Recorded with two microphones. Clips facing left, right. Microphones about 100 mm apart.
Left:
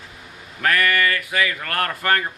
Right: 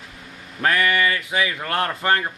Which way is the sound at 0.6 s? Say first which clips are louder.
Even; 20° right (ahead or behind).